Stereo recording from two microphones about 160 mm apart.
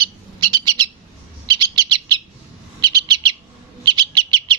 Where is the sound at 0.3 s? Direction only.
25° right (ahead or behind).